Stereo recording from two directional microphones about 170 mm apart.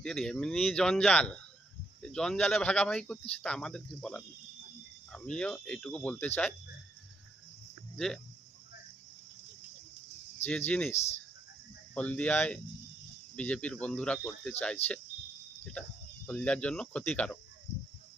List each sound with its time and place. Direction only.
0.0 s speech: 5° left (ahead or behind)
7.9 s speech: 5° left (ahead or behind)
10.7 s speech: 10° left (ahead or behind)
10.9 s speech: 40° left (ahead or behind)
11.9 s speech: 10° left (ahead or behind)
16.2 s speech: 10° left (ahead or behind)